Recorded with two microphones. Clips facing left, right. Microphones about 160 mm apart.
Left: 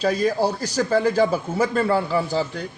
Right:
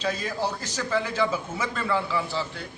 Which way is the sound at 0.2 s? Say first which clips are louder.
Left 9 dB; 40° left (ahead or behind).